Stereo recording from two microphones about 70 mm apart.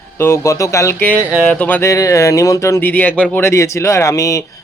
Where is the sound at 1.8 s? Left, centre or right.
Left.